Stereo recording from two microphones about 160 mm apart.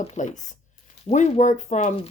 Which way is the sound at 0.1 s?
50° left (ahead or behind).